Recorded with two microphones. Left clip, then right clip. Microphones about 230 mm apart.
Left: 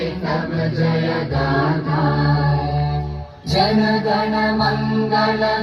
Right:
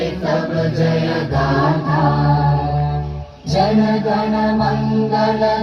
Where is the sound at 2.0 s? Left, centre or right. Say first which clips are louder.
Right 3 dB; left.